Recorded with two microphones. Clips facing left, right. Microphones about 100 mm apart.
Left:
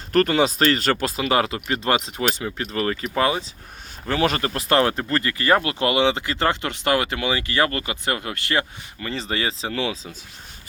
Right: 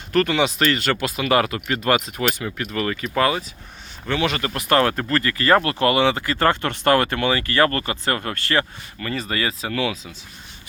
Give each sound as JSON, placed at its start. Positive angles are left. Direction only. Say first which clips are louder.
{"t": 0.1, "sound": "speech", "louder": "left 1 dB", "side_deg": 40}
{"t": 4.0, "sound": "speech", "louder": "left 1 dB", "side_deg": 35}